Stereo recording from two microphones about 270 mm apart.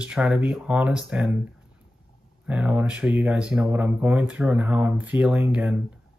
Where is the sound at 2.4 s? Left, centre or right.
Centre.